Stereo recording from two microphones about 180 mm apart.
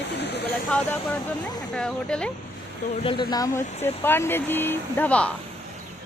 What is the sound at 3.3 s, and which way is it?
Speech, 20° left (ahead or behind).